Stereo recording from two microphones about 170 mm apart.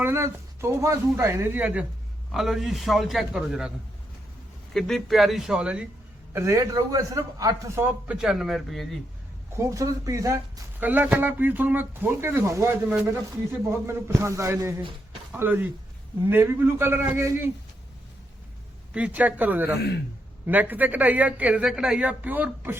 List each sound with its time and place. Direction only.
0.0 s a man's voice: 15° right (ahead or behind)
4.7 s a man's voice: centre (ahead or behind)
6.3 s speech: 20° right (ahead or behind); by 9.0 s centre (ahead or behind)
9.6 s speech: 20° right (ahead or behind)
18.9 s speech: 10° right (ahead or behind)